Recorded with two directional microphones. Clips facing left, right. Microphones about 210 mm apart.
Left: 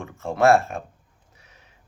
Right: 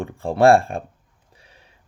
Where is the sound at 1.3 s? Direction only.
30° right (ahead or behind).